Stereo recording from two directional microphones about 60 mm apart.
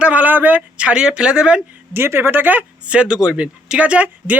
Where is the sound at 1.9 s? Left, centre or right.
Right.